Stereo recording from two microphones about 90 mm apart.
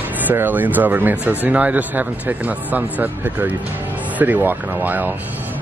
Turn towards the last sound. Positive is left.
turn(degrees=-20)  # may be behind; listen again after turning